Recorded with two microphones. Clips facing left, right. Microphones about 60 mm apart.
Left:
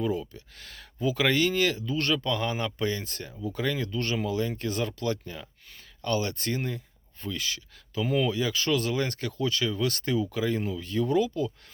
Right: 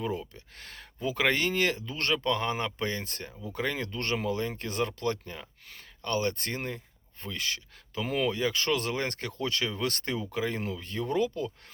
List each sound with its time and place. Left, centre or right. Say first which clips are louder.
0.6 s speech: left 4 dB; right